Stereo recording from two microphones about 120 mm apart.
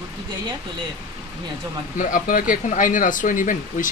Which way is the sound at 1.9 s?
90° left.